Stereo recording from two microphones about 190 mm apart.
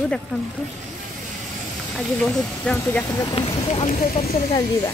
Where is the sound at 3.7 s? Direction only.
40° left (ahead or behind).